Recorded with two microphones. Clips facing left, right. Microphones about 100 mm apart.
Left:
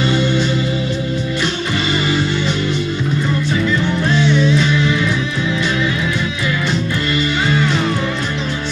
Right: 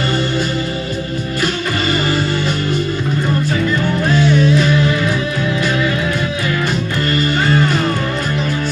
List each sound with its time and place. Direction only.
4.1 s music: 45° right (ahead or behind)
7.2 s music: 45° right (ahead or behind)